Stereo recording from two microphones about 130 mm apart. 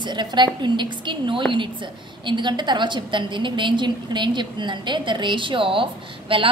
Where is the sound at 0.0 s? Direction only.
35° right (ahead or behind).